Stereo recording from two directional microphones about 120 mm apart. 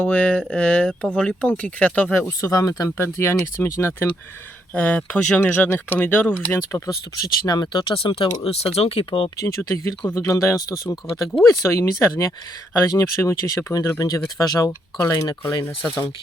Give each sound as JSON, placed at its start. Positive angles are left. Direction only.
{"t": 0.0, "sound": "speech", "side_deg": 15}
{"t": 2.4, "sound": "speech", "side_deg": 30}
{"t": 4.7, "sound": "speech", "side_deg": 10}
{"t": 7.4, "sound": "speech", "side_deg": 35}
{"t": 9.4, "sound": "speech", "side_deg": 25}